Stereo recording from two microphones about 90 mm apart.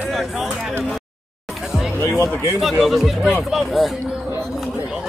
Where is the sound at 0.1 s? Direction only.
5° right (ahead or behind).